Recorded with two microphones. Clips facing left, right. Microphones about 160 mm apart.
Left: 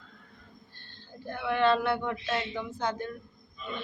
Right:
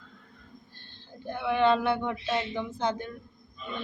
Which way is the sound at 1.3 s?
20° right (ahead or behind).